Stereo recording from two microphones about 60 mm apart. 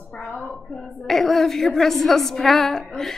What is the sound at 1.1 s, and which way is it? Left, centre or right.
A woman's voice, centre.